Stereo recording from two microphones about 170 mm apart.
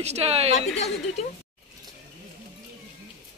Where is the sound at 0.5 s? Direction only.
40° left (ahead or behind).